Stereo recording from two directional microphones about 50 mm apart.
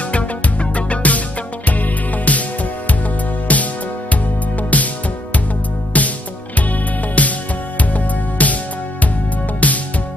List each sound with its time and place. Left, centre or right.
0.1 s music: left
3.5 s music: left
5.9 s music: left
9.6 s music: left